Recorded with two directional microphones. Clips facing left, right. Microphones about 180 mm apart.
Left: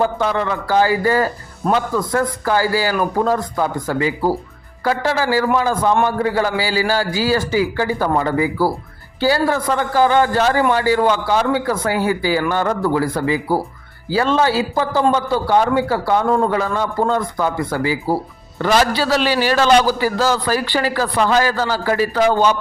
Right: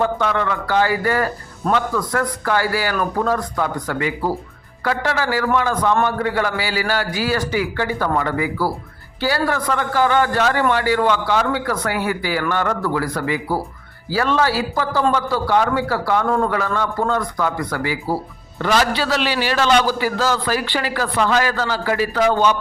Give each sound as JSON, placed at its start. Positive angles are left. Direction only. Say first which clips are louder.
{"t": 0.0, "sound": "a man's voice", "louder": "left 1 dB", "side_deg": 30}
{"t": 18.6, "sound": "a man's voice", "louder": "left 2 dB", "side_deg": 40}